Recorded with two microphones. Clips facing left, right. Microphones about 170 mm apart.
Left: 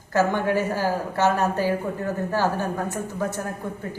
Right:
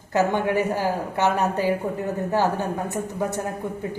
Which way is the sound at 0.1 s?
20° right (ahead or behind).